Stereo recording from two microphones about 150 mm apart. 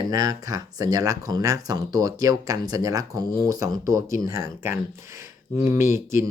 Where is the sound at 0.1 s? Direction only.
25° right (ahead or behind).